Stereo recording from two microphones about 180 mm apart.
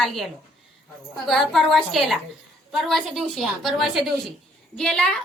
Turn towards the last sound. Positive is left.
turn(degrees=5)  # may be behind; listen again after turning